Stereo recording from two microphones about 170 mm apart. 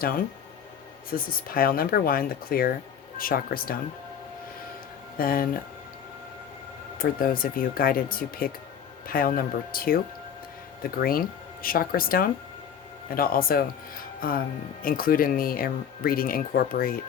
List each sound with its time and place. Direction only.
1.1 s speech: 60° left (ahead or behind)
5.1 s speech: 60° left (ahead or behind)
7.0 s speech: 55° left (ahead or behind)